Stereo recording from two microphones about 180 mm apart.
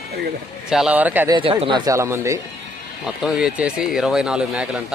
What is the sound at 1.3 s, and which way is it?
Speech, 30° right (ahead or behind).